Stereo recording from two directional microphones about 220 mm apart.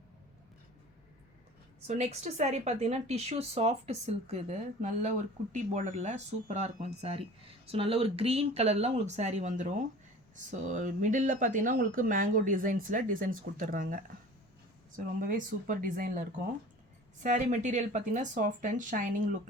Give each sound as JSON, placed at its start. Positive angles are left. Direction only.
{"t": 1.9, "sound": "speech", "side_deg": -30}
{"t": 17.2, "sound": "speech", "side_deg": -35}